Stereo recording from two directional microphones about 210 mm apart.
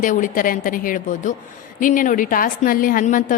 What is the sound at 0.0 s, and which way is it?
A woman's voice, 40° left (ahead or behind).